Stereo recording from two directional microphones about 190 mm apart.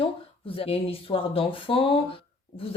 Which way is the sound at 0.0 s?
30° left (ahead or behind).